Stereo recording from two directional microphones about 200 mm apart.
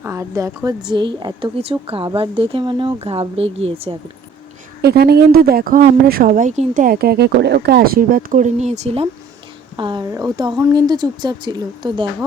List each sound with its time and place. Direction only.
0.0 s a woman's voice: 15° right (ahead or behind)
4.8 s a woman's voice: 55° right (ahead or behind); by 12.0 s 20° right (ahead or behind)